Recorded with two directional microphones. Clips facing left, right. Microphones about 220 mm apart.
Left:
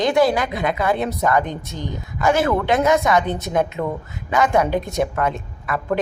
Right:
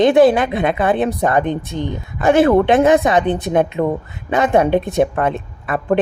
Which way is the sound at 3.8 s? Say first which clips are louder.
Right 6 dB; 30° right (ahead or behind).